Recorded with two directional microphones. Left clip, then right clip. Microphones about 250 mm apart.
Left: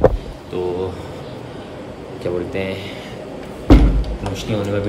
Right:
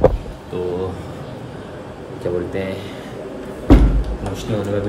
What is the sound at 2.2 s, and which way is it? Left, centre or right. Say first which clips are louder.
Speech: even; centre.